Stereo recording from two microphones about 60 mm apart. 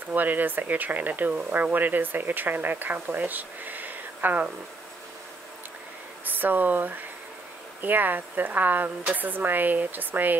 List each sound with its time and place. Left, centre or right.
0.1 s speech: right
6.2 s speech: right